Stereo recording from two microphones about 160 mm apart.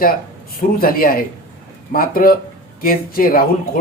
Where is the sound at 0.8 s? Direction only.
65° left (ahead or behind).